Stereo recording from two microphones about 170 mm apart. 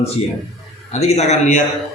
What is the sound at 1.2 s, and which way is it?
Speech, 45° left (ahead or behind).